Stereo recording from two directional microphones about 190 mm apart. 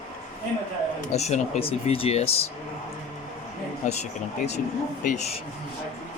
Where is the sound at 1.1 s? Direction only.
35° left (ahead or behind).